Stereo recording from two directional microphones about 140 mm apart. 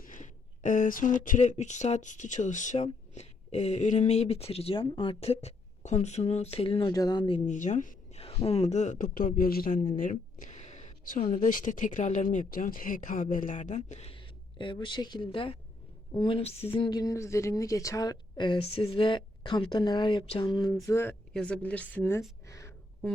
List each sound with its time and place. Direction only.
0.0 s speech: 65° left (ahead or behind); by 6.9 s 40° left (ahead or behind)
6.9 s speech: 30° left (ahead or behind)
7.4 s speech: 60° left (ahead or behind)
8.4 s speech: 45° left (ahead or behind); by 12.2 s 65° left (ahead or behind)
12.3 s speech: 75° left (ahead or behind); by 20.7 s 30° left (ahead or behind)
20.8 s a woman's voice: 20° left (ahead or behind)
22.4 s a sound: 20° left (ahead or behind)